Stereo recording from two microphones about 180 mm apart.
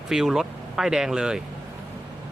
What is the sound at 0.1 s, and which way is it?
Speech, centre (ahead or behind).